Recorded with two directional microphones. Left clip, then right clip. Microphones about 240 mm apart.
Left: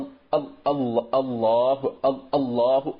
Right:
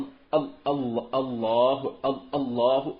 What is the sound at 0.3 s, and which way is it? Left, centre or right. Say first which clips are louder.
A man's voice: left 2 dB; centre.